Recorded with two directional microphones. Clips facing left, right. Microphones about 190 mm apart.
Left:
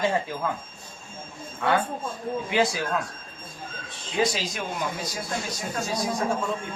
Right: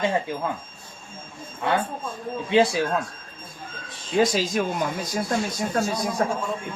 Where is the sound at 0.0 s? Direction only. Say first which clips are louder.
Right 1 dB; 20° right (ahead or behind).